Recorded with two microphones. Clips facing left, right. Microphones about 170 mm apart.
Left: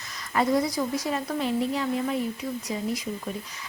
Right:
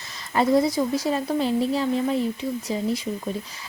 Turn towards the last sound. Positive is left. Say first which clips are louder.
# right 4 dB
turn(degrees=-30)  # may be behind; listen again after turning